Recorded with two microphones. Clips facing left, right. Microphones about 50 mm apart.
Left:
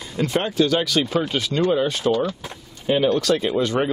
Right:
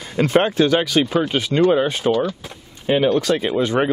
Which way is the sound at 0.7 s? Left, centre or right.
Right.